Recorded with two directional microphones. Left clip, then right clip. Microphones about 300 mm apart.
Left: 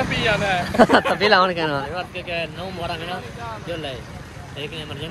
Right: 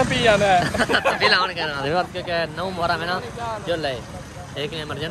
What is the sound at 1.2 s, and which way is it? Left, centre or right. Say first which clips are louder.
Speech: left 2 dB; centre.